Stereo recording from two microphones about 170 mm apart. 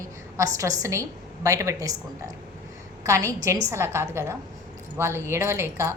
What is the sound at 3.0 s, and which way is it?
A woman's voice, 15° right (ahead or behind).